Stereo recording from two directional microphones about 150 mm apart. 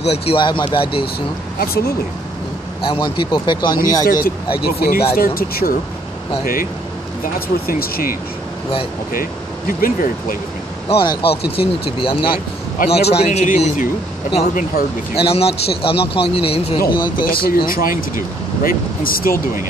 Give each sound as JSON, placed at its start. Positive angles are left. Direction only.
{"t": 0.0, "sound": "a man's voice", "side_deg": 40}
{"t": 1.6, "sound": "speech", "side_deg": 85}
{"t": 2.8, "sound": "a man's voice", "side_deg": 35}
{"t": 4.0, "sound": "speech", "side_deg": 75}
{"t": 6.4, "sound": "speech", "side_deg": 70}
{"t": 7.3, "sound": "speech", "side_deg": 80}
{"t": 10.9, "sound": "a man's voice", "side_deg": 40}
{"t": 12.3, "sound": "speech", "side_deg": 85}
{"t": 13.1, "sound": "a man's voice", "side_deg": 50}
{"t": 15.1, "sound": "a man's voice", "side_deg": 40}
{"t": 16.8, "sound": "speech", "side_deg": 80}